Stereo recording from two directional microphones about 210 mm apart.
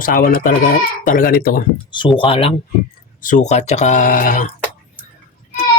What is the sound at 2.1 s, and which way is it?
Speech, 25° left (ahead or behind).